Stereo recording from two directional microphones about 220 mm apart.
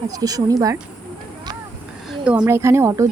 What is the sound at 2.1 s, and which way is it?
Speech, 5° right (ahead or behind).